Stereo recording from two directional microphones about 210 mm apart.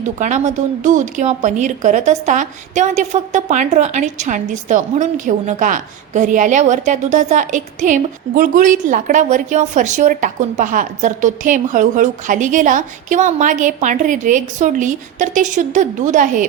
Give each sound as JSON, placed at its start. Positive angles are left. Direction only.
{"t": 0.2, "sound": "a woman's voice", "side_deg": -35}